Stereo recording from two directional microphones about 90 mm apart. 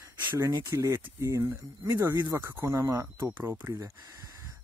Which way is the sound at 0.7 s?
30° right (ahead or behind).